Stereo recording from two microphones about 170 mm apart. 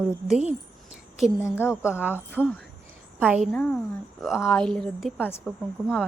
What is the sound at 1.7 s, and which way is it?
A woman's voice, 5° right (ahead or behind).